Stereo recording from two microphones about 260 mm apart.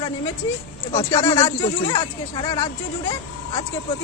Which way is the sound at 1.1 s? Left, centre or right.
Centre.